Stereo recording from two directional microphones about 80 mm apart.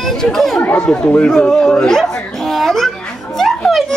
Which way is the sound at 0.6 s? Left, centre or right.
Centre.